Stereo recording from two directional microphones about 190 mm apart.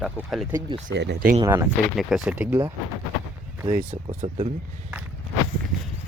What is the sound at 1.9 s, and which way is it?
Speech, 5° right (ahead or behind).